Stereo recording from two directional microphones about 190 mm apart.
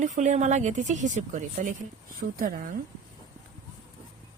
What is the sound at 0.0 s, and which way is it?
Speech, 40° right (ahead or behind).